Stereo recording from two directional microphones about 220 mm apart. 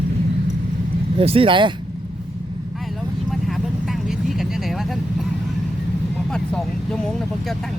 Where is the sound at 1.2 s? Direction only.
25° right (ahead or behind).